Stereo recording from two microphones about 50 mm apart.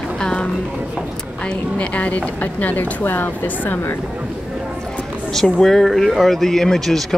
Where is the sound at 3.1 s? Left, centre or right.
Left.